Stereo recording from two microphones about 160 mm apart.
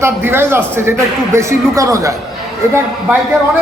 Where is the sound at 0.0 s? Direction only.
15° right (ahead or behind).